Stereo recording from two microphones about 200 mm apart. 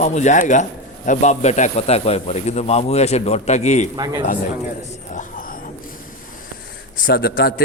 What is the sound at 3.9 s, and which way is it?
Speech, 20° right (ahead or behind).